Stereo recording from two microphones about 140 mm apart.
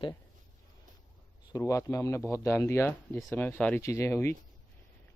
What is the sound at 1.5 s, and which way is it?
Speech, 25° left (ahead or behind).